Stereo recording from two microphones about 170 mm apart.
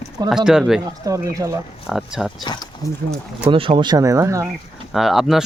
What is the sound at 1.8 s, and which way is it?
Speech, 5° right (ahead or behind).